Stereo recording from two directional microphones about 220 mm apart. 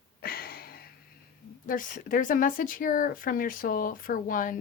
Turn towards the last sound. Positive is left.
turn(degrees=40)  # may be behind; listen again after turning